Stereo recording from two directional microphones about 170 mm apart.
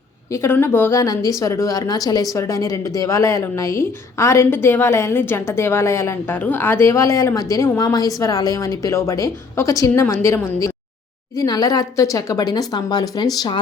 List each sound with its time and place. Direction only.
0.3 s a woman's voice: 15° left (ahead or behind)